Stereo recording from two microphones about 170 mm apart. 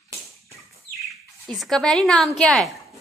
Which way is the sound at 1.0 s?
Centre (ahead or behind).